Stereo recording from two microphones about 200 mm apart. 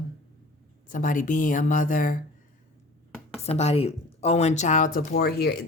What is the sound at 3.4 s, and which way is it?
Speech, 30° left (ahead or behind).